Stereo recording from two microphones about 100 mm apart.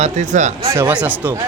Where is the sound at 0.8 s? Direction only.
15° right (ahead or behind).